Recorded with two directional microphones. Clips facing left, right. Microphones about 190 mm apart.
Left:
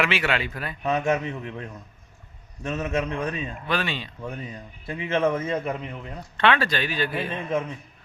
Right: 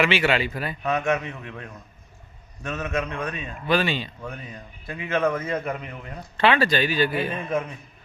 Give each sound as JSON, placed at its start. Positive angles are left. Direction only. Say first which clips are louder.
{"t": 0.0, "sound": "speech", "louder": "right 3 dB", "side_deg": 0}
{"t": 0.8, "sound": "speech", "louder": "left 1 dB", "side_deg": 25}
{"t": 3.7, "sound": "speech", "louder": "right 6 dB", "side_deg": 0}
{"t": 4.3, "sound": "speech", "louder": "left 2 dB", "side_deg": 25}
{"t": 6.1, "sound": "speech", "louder": "right 2 dB", "side_deg": -5}
{"t": 7.3, "sound": "speech", "louder": "even", "side_deg": 25}